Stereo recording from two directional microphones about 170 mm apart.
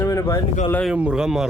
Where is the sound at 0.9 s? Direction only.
5° right (ahead or behind).